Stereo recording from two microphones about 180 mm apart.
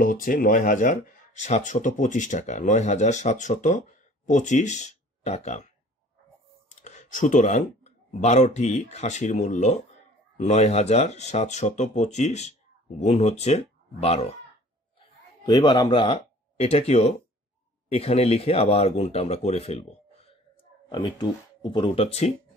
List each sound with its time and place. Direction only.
0.0 s speech: 50° left (ahead or behind)
6.7 s speech: 40° left (ahead or behind)
15.0 s speech: 25° left (ahead or behind)
20.9 s speech: 25° left (ahead or behind)